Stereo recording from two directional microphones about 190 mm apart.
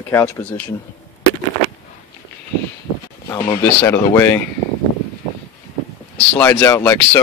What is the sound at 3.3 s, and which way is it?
Speech, 15° left (ahead or behind).